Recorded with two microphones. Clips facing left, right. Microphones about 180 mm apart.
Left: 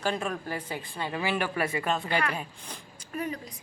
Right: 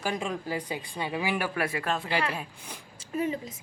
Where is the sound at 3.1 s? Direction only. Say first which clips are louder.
Right 4 dB; 25° right (ahead or behind).